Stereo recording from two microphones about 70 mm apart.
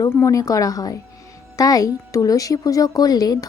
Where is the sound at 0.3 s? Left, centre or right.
Left.